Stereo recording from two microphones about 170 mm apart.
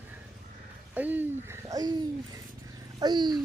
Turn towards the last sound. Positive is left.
turn(degrees=-25)  # may be behind; listen again after turning